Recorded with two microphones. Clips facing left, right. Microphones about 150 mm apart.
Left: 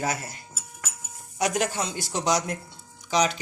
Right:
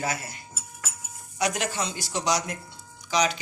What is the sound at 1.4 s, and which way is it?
Speech, 50° left (ahead or behind).